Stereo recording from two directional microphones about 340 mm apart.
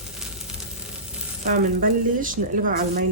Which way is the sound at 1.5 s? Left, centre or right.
Right.